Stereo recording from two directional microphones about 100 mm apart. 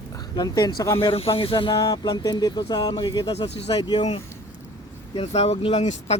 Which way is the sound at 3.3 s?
90° left.